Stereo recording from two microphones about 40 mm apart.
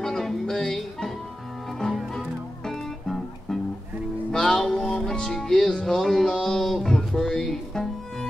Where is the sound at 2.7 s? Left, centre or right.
Centre.